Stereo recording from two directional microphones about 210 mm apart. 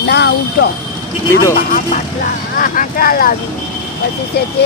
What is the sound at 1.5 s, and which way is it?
Speech, 40° left (ahead or behind).